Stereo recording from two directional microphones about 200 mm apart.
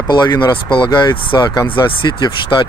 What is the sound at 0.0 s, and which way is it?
Speech, 20° left (ahead or behind).